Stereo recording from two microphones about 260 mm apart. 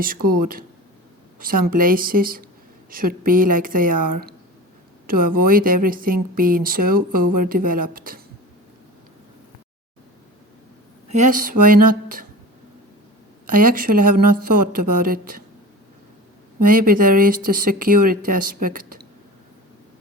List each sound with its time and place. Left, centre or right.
0.0 s speech: right
11.1 s speech: right
13.5 s speech: right
16.6 s speech: right